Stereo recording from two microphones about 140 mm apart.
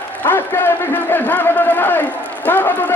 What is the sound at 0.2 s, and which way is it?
A man's voice, 15° left (ahead or behind).